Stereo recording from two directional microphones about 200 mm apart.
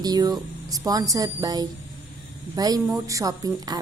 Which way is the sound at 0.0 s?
20° right (ahead or behind).